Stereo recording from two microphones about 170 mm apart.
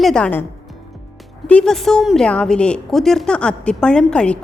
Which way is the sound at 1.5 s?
5° left (ahead or behind).